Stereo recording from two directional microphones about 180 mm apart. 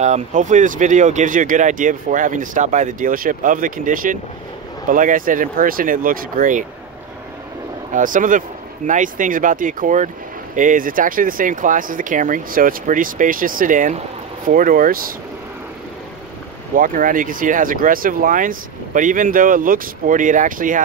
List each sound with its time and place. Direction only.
0.0 s speech: 40° right (ahead or behind)
7.9 s speech: 45° right (ahead or behind)
16.7 s speech: 50° right (ahead or behind)